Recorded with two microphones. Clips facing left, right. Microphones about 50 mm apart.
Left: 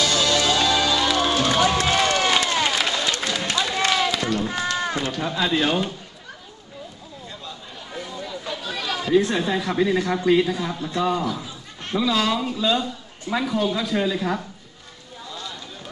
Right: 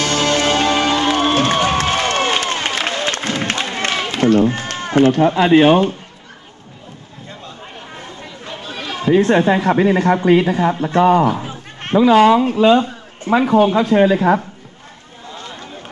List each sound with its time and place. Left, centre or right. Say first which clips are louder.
0.0 s music: right 4 dB; right
8.0 s speech: left 1 dB; right
15.2 s a sound: right 4 dB; right